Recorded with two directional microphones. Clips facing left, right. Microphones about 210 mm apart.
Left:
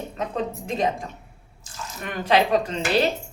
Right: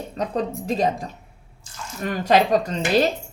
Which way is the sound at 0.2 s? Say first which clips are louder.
Right 3 dB; 40° right (ahead or behind).